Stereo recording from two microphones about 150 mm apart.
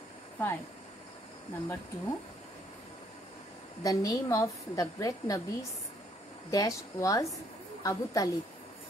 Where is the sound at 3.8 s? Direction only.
25° left (ahead or behind).